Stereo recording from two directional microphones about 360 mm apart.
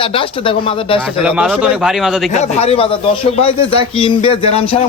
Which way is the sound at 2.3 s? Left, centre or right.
Centre.